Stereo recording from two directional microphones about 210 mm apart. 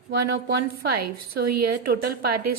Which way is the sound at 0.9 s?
45° right (ahead or behind).